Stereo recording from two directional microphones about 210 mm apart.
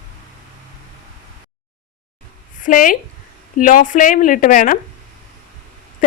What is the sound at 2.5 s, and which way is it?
A woman's voice, 40° left (ahead or behind).